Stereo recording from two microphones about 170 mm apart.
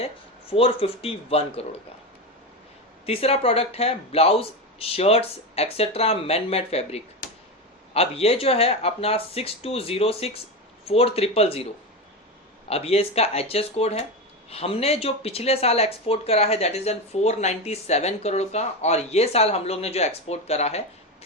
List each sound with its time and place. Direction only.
0.5 s speech: 35° left (ahead or behind)
3.1 s speech: 35° left (ahead or behind)
12.6 s speech: 35° left (ahead or behind)